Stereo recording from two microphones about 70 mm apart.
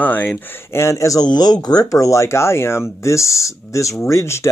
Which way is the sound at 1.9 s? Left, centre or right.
Left.